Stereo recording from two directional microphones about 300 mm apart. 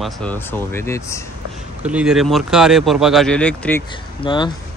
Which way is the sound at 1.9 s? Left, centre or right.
Centre.